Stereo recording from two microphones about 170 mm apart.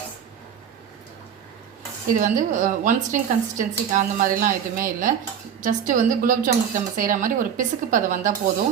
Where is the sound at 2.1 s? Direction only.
50° right (ahead or behind).